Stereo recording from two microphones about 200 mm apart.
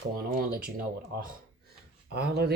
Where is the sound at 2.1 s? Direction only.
55° right (ahead or behind).